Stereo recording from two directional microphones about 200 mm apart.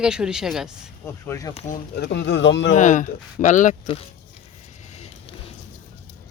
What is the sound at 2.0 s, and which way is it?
Speech, 60° left (ahead or behind).